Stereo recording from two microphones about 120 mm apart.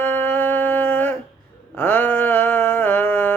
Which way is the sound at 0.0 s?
15° left (ahead or behind).